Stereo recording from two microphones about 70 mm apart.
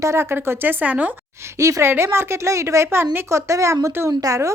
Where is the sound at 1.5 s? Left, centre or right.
Right.